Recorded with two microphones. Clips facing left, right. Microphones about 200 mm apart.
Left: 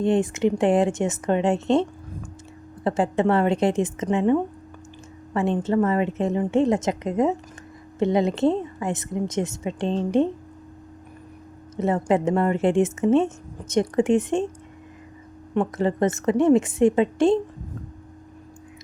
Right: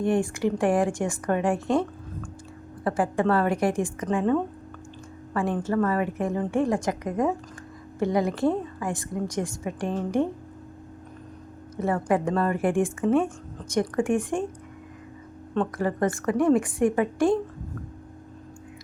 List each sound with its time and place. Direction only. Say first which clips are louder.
0.0 s a woman's voice: left 3 dB; 20° left (ahead or behind)
11.8 s a woman's voice: left 3 dB; 20° left (ahead or behind)
15.5 s a woman's voice: left 3 dB; 20° left (ahead or behind)